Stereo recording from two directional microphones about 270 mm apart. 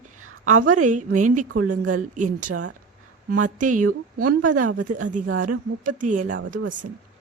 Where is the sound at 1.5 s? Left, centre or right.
Right.